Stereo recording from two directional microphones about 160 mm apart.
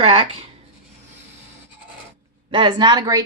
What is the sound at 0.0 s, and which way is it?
Speech, 35° right (ahead or behind).